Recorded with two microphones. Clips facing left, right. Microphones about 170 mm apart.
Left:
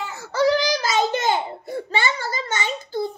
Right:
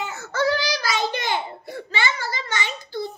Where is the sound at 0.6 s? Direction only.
45° left (ahead or behind).